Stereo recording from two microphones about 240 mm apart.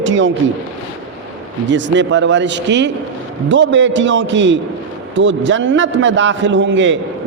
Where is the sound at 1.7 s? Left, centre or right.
Right.